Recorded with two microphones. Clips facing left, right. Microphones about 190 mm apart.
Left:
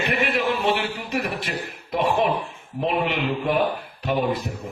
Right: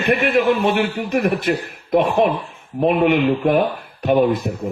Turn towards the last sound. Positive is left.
turn(degrees=-55)  # may be behind; listen again after turning